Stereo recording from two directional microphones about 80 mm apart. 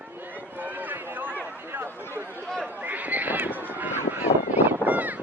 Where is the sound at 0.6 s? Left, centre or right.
Right.